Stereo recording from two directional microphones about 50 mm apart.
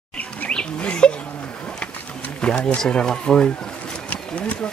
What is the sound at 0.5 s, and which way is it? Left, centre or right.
Bird, left.